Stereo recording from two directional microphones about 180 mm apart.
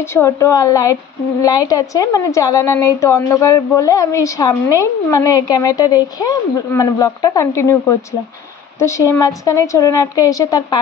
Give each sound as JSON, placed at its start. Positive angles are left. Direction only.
{"t": 0.1, "sound": "a woman's voice", "side_deg": 15}